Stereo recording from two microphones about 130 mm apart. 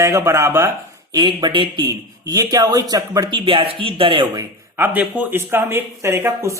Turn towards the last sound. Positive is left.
turn(degrees=-20)  # may be behind; listen again after turning